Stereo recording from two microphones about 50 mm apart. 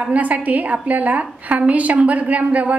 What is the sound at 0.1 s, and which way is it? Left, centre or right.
A woman's voice, right.